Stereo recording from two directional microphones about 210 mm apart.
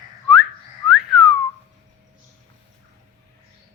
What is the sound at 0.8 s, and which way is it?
Whistling, centre (ahead or behind).